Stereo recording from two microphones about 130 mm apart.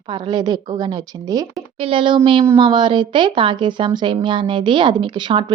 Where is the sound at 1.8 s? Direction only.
45° right (ahead or behind).